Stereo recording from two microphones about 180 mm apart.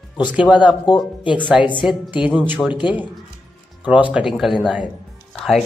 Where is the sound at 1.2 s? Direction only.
25° left (ahead or behind).